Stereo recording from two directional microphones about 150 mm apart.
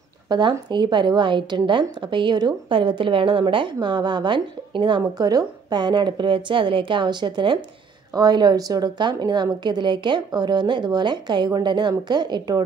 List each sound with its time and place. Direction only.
0.3 s a woman's voice: 30° right (ahead or behind)